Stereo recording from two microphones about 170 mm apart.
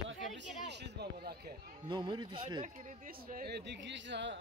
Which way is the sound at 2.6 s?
45° right (ahead or behind).